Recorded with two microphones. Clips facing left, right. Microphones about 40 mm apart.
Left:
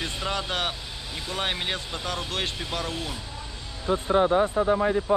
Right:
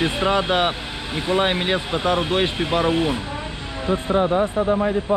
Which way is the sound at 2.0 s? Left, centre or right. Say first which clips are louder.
Right 10 dB; right.